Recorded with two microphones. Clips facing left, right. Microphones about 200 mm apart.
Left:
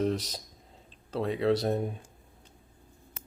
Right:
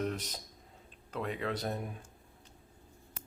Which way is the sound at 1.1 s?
30° left (ahead or behind).